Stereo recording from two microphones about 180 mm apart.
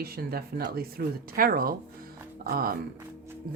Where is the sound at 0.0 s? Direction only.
55° right (ahead or behind).